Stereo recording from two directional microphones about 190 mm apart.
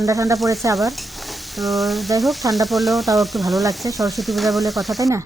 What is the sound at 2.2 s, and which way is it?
Frying, centre (ahead or behind).